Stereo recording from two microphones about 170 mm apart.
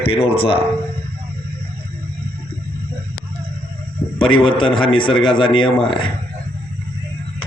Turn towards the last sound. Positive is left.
turn(degrees=30)  # may be behind; listen again after turning